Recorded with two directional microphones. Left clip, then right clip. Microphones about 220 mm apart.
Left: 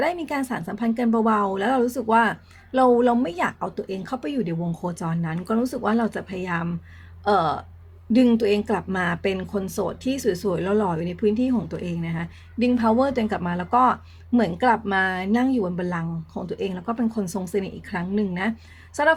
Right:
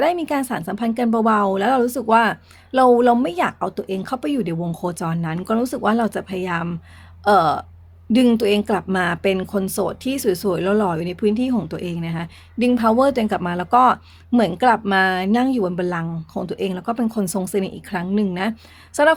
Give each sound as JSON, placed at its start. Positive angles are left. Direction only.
{"t": 0.0, "sound": "speech", "side_deg": -45}